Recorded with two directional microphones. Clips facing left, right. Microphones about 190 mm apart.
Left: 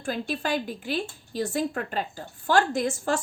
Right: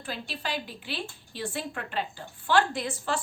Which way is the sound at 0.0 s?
50° left (ahead or behind).